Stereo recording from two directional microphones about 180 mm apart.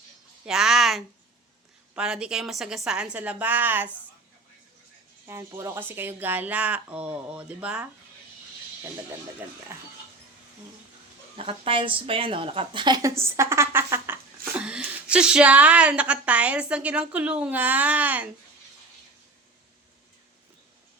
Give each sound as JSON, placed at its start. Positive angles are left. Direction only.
{"t": 0.4, "sound": "a woman's voice", "side_deg": -5}
{"t": 5.2, "sound": "a woman's voice", "side_deg": -15}
{"t": 9.7, "sound": "a woman's voice", "side_deg": -15}
{"t": 11.3, "sound": "a woman's voice", "side_deg": -30}